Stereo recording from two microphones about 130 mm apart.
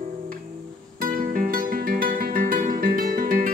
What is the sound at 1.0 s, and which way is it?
Music, 90° right.